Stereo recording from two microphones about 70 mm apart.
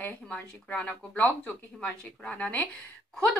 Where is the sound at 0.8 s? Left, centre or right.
Left.